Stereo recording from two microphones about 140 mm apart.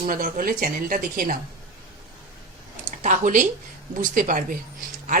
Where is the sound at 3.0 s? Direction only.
65° right (ahead or behind).